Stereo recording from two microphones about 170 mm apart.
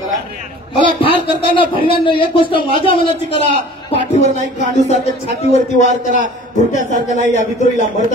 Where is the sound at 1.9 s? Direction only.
30° left (ahead or behind).